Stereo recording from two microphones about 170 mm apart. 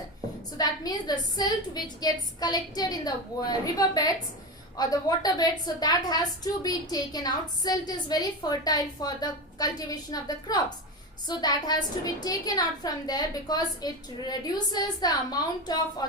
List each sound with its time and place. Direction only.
0.5 s a woman's voice: 25° left (ahead or behind)